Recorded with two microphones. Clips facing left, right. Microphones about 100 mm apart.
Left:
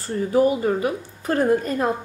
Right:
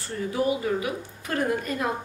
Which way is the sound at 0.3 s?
40° left (ahead or behind).